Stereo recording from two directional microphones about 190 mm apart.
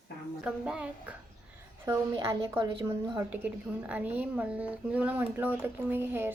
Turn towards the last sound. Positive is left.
turn(degrees=-10)  # may be behind; listen again after turning